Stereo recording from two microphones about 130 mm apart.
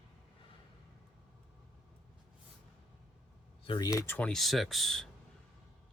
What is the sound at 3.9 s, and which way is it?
Speech, 15° left (ahead or behind).